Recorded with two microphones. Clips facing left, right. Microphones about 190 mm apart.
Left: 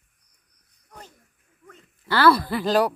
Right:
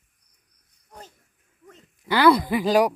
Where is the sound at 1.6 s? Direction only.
15° right (ahead or behind).